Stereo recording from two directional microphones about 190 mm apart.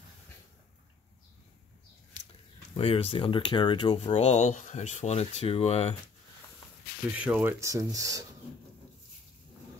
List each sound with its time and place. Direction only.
2.7 s speech: 30° left (ahead or behind)
7.2 s speech: 5° right (ahead or behind)
7.6 s speech: 15° right (ahead or behind)